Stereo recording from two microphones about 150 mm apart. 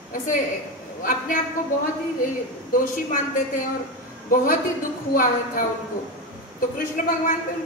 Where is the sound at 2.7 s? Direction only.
70° left (ahead or behind).